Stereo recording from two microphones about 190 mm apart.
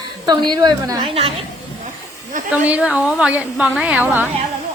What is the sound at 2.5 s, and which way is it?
A woman's voice, 5° right (ahead or behind).